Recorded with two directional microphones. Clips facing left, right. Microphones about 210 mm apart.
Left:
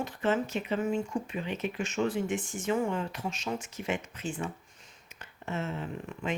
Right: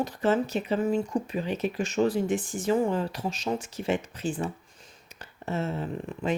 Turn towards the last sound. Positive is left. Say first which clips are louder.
# right 5 dB
turn(degrees=-35)  # may be behind; listen again after turning